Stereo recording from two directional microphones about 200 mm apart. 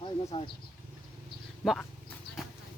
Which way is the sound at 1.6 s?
Centre (ahead or behind).